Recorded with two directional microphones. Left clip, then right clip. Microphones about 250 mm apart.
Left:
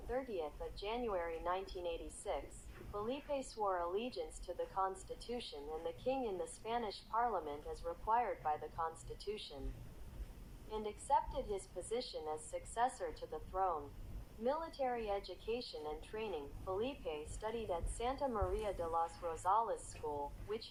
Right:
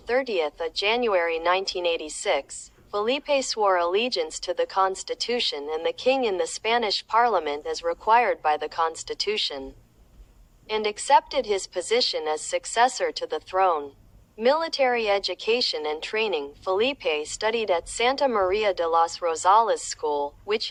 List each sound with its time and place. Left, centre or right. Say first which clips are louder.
0.1 s speech: right 18 dB; right
10.7 s speech: right 17 dB; right